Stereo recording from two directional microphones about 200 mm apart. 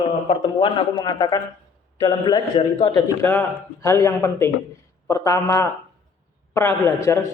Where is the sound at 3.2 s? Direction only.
10° left (ahead or behind).